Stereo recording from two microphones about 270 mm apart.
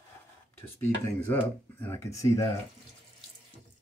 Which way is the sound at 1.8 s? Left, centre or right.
Centre.